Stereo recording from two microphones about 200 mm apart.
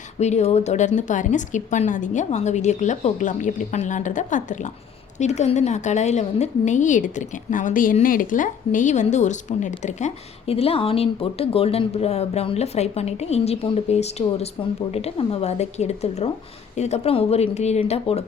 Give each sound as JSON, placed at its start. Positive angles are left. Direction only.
{"t": 0.2, "sound": "a woman's voice", "side_deg": 35}